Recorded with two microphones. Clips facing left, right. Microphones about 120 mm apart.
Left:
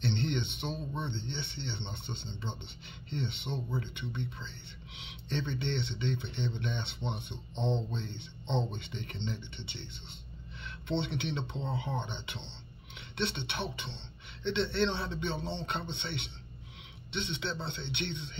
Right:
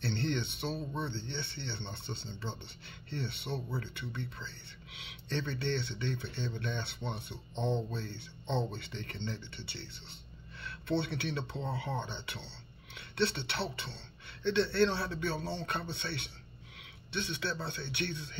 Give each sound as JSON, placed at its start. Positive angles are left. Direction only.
{"t": 0.0, "sound": "speech", "side_deg": 20}